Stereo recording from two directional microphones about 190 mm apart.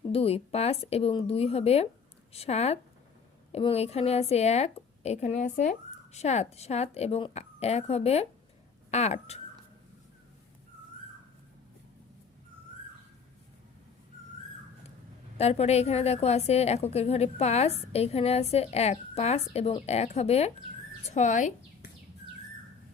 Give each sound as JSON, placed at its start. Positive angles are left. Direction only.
{"t": 0.1, "sound": "a woman's voice", "side_deg": 30}
{"t": 15.4, "sound": "a woman's voice", "side_deg": 35}